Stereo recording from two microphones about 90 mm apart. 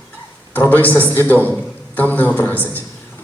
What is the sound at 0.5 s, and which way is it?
A man's voice, 20° left (ahead or behind).